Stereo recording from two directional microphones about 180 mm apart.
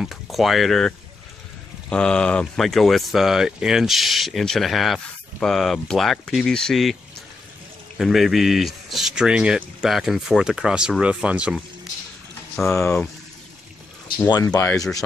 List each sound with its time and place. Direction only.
0.0 s speech: centre (ahead or behind)
8.0 s speech: centre (ahead or behind)
12.6 s speech: 10° left (ahead or behind)
14.1 s speech: 20° left (ahead or behind)